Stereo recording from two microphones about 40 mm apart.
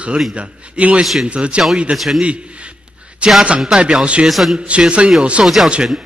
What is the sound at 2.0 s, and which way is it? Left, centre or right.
Speech, centre.